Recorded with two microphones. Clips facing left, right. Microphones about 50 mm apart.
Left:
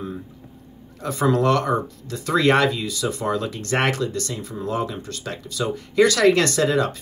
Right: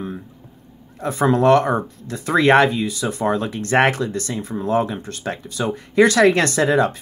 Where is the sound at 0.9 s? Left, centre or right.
Right.